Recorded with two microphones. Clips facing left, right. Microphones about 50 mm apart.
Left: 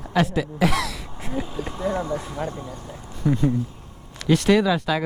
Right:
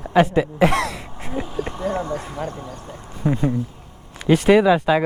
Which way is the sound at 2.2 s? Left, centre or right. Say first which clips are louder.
Right 1 dB; centre.